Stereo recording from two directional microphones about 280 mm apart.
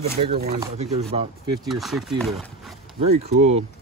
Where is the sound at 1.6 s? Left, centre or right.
Centre.